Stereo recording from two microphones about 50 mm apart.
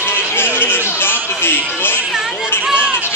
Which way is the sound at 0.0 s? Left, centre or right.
Left.